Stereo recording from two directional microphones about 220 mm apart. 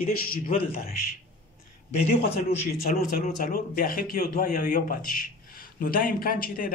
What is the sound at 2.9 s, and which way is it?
Speech, 35° left (ahead or behind).